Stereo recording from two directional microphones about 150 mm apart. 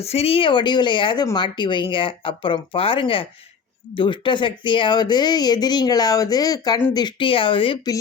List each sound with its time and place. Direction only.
0.0 s speech: 40° left (ahead or behind)